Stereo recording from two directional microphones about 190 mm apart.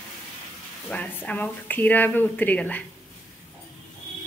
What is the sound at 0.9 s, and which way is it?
Speech, 10° left (ahead or behind).